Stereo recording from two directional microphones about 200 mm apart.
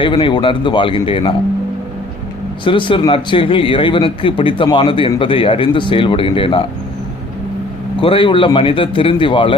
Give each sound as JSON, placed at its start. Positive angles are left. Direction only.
{"t": 0.0, "sound": "speech", "side_deg": 25}
{"t": 2.6, "sound": "speech", "side_deg": 25}
{"t": 8.0, "sound": "speech", "side_deg": 25}